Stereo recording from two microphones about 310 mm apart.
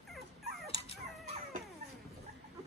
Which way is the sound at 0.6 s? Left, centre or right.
Centre.